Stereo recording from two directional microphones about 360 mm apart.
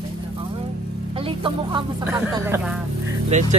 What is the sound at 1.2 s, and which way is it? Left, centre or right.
Speech, centre.